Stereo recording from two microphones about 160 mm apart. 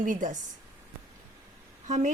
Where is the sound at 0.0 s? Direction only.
50° right (ahead or behind).